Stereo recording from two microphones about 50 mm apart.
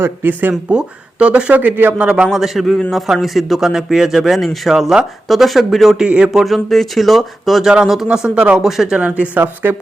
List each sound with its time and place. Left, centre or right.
0.0 s speech: right
0.7 s speech: right
1.6 s speech: right
2.0 s speech: right
2.3 s speech: centre
6.1 s speech: right
6.4 s speech: centre
8.1 s speech: centre
9.0 s speech: right